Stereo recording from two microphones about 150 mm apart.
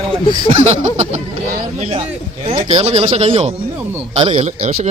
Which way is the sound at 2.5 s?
45° right (ahead or behind).